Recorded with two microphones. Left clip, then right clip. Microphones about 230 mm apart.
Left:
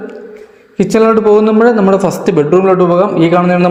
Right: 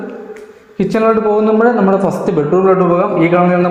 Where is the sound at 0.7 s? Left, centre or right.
Left.